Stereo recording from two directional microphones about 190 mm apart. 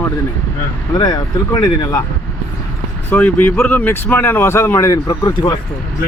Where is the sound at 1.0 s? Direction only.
20° left (ahead or behind).